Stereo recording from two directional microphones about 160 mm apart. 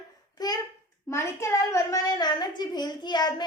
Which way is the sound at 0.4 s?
25° left (ahead or behind).